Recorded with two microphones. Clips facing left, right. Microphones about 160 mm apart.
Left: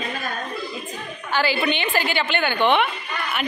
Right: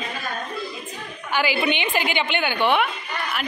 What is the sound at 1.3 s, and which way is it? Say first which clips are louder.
A woman's voice: even; 15° right (ahead or behind).